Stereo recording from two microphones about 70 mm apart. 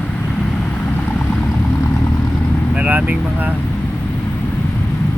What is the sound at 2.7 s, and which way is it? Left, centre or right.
Vehicle, centre.